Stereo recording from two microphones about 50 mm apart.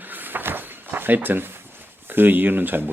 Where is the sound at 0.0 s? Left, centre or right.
Right.